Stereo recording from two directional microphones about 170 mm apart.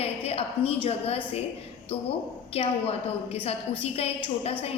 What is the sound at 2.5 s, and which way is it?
A woman's voice, 35° left (ahead or behind).